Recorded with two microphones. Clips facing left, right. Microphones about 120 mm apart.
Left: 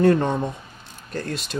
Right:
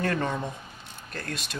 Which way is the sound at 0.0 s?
25° left (ahead or behind).